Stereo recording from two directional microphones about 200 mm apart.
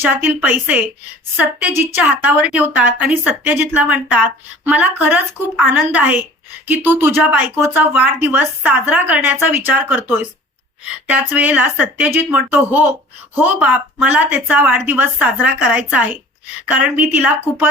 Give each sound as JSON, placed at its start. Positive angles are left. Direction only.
{"t": 0.0, "sound": "a woman's voice", "side_deg": -10}
{"t": 11.1, "sound": "a woman's voice", "side_deg": -10}